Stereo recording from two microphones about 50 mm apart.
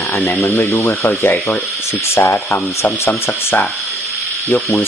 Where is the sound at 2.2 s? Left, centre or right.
Left.